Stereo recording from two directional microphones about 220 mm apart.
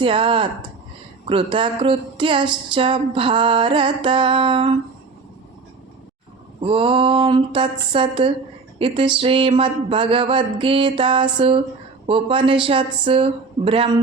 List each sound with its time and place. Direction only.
0.0 s music: 25° right (ahead or behind)
6.6 s music: 25° right (ahead or behind)